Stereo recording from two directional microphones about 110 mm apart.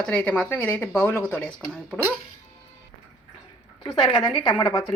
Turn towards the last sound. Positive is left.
turn(degrees=40)  # may be behind; listen again after turning